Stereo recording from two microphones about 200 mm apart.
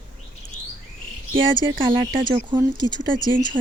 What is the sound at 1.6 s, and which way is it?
Speech, 25° right (ahead or behind).